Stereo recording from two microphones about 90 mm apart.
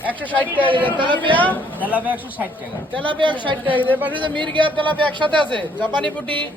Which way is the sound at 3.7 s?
20° left (ahead or behind).